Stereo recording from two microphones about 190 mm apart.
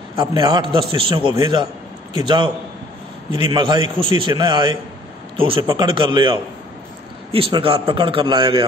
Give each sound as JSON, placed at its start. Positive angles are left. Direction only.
{"t": 0.2, "sound": "a man's voice", "side_deg": -20}